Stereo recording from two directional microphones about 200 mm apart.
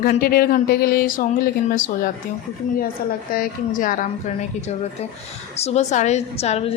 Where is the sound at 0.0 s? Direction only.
50° left (ahead or behind).